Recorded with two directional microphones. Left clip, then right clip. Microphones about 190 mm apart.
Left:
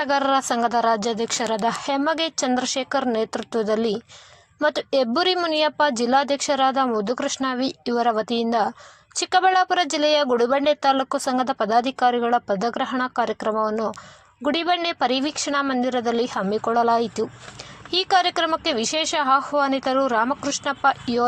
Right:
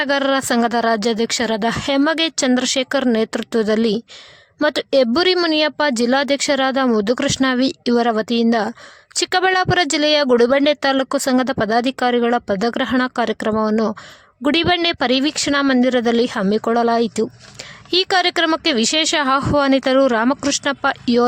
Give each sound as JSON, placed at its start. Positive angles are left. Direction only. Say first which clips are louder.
{"t": 0.0, "sound": "speech", "louder": "right 3 dB", "side_deg": -30}